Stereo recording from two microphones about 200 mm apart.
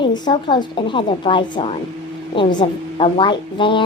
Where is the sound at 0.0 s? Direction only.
25° left (ahead or behind).